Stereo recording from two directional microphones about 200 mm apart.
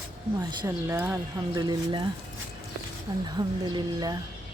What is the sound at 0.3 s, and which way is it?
Speech, 15° right (ahead or behind).